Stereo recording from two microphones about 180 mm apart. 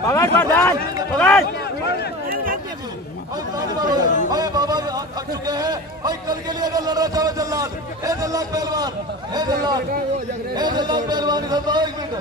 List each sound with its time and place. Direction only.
0.0 s a man's voice: 15° left (ahead or behind)
2.3 s a sound: 50° right (ahead or behind)
3.5 s a man's voice: 20° right (ahead or behind)